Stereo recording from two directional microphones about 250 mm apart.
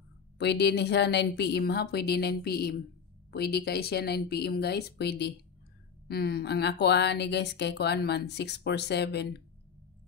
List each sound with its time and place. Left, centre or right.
0.4 s a woman's voice: left